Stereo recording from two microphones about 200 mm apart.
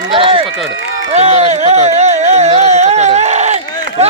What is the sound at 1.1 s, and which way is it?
Music, 35° right (ahead or behind).